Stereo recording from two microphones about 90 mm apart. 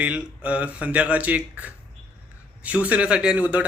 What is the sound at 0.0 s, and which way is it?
A man's voice, 15° right (ahead or behind).